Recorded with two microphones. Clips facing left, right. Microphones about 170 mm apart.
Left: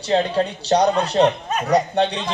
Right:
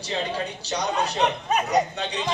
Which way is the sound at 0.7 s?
50° left (ahead or behind).